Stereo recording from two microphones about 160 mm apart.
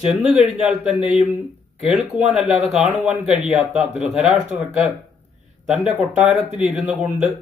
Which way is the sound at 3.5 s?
45° right (ahead or behind).